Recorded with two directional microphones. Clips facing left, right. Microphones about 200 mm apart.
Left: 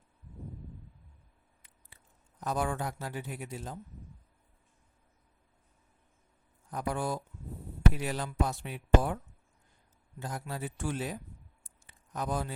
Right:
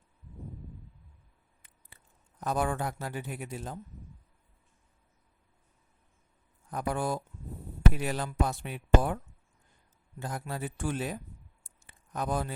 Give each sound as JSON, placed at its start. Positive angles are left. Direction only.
{"t": 2.4, "sound": "a man's voice", "side_deg": -55}
{"t": 6.7, "sound": "a man's voice", "side_deg": -55}
{"t": 10.2, "sound": "a man's voice", "side_deg": -55}
{"t": 11.9, "sound": "a sound", "side_deg": -55}